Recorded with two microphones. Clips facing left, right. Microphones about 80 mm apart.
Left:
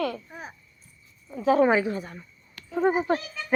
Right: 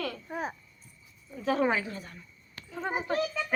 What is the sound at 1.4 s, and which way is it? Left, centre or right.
A woman's voice, centre.